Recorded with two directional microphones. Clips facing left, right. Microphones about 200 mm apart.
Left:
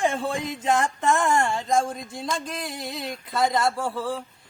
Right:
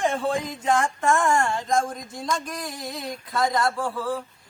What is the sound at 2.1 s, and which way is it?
Speech, 25° left (ahead or behind).